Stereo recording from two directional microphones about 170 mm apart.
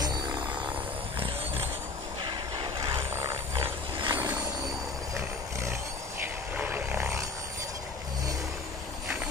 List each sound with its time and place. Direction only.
2.2 s a sound: 25° right (ahead or behind)
4.0 s vehicle: 25° right (ahead or behind)
5.1 s roaring cats: 15° right (ahead or behind)
6.2 s vehicle: 10° right (ahead or behind)